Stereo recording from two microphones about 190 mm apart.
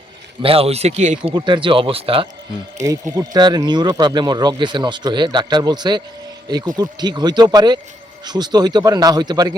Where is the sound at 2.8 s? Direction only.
15° right (ahead or behind).